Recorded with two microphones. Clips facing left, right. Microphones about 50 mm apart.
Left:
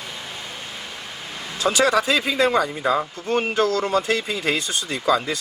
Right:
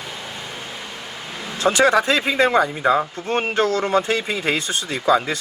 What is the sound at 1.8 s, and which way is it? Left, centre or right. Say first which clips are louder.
Speech: right 2 dB; right.